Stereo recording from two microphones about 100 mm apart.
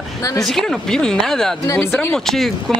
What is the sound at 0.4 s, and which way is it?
Speech, 5° left (ahead or behind).